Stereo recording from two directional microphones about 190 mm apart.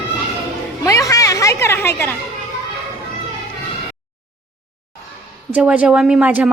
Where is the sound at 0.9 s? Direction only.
15° left (ahead or behind).